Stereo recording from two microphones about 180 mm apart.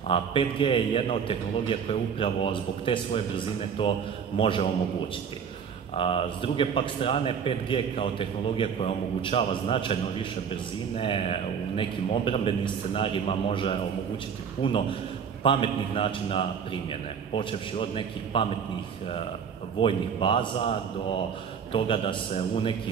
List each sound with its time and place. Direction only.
0.1 s a man's voice: 30° left (ahead or behind)
5.9 s a man's voice: 30° left (ahead or behind)
11.0 s a man's voice: 30° left (ahead or behind)
19.8 s a man's voice: 30° left (ahead or behind)
21.7 s a man's voice: 30° left (ahead or behind)